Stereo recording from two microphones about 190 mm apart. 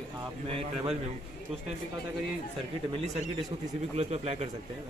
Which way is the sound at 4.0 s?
35° right (ahead or behind).